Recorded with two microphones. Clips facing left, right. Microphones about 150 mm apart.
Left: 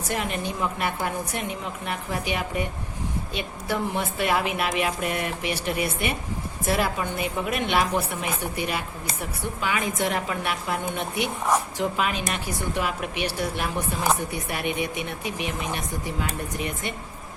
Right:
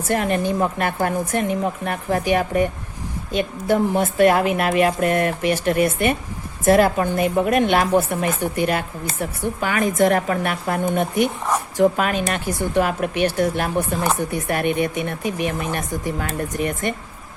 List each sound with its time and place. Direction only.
0.1 s speech: 50° right (ahead or behind)